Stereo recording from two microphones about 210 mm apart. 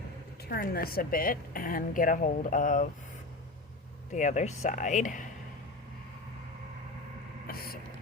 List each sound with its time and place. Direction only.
0.4 s a woman's voice: 45° left (ahead or behind)
4.1 s a woman's voice: 35° left (ahead or behind)
7.4 s speech: 45° left (ahead or behind)